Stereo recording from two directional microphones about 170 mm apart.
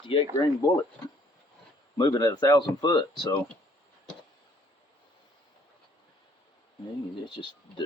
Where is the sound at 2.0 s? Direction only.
25° left (ahead or behind).